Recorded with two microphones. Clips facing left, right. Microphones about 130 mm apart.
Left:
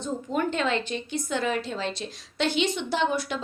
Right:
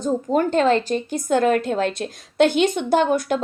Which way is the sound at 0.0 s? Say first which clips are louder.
Right 8 dB; 40° right (ahead or behind).